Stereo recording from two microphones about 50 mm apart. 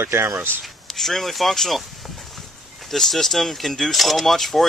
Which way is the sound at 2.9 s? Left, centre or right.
Centre.